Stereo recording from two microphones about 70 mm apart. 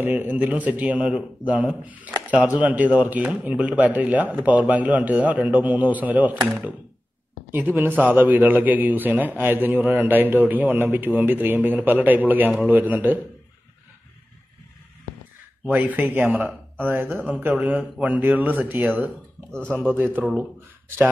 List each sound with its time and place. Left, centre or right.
0.0 s speech: right
7.5 s speech: right
15.7 s speech: right
19.5 s speech: centre
20.0 s speech: right